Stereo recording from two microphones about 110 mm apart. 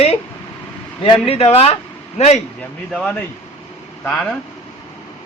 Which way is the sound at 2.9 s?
10° left (ahead or behind).